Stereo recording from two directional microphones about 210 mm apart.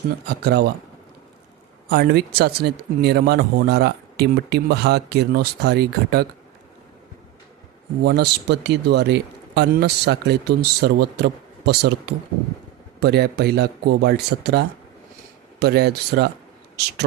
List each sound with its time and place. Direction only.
0.3 s speech: 50° right (ahead or behind)
1.9 s speech: 50° right (ahead or behind)
8.0 s speech: 50° right (ahead or behind)